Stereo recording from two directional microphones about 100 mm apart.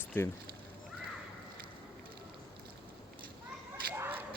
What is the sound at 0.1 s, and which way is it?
Speech, 20° left (ahead or behind).